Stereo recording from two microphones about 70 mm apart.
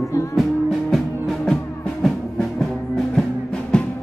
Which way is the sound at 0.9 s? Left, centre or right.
Centre.